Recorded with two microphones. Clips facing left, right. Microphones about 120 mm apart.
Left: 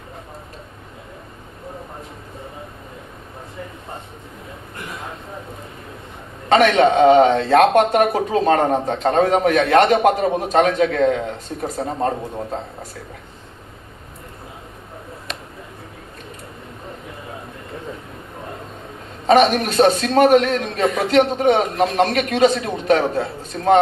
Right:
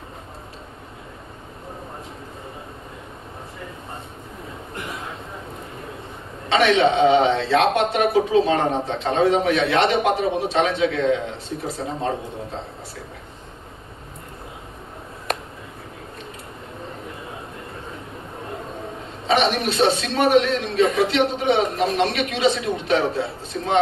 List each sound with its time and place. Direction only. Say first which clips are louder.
6.5 s a man's voice: left 3 dB; 45° left (ahead or behind)
19.3 s a man's voice: left 6 dB; 45° left (ahead or behind)